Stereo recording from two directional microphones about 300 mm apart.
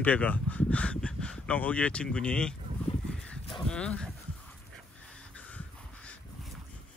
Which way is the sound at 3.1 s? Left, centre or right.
Centre.